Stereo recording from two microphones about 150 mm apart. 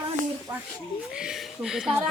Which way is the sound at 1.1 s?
5° right (ahead or behind).